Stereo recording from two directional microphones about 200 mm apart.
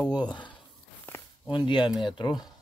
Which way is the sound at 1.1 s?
10° left (ahead or behind).